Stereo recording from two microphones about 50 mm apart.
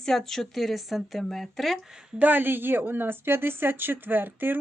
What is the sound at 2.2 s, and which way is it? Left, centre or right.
Speech, right.